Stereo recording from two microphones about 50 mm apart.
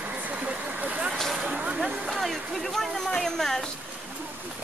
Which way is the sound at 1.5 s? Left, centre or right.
Right.